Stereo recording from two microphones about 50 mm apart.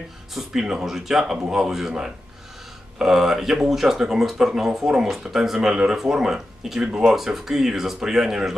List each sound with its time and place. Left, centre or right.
0.6 s speech: centre
3.0 s speech: centre